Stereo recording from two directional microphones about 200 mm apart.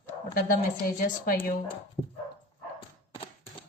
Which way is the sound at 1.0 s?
45° left (ahead or behind).